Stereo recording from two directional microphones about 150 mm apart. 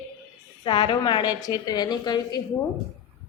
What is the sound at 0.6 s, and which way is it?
A woman's voice, 30° left (ahead or behind).